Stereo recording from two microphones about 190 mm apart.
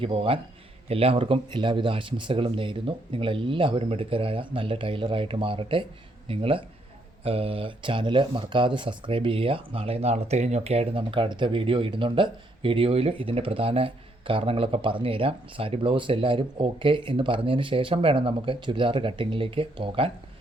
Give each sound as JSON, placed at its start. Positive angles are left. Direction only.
{"t": 0.0, "sound": "speech", "side_deg": -30}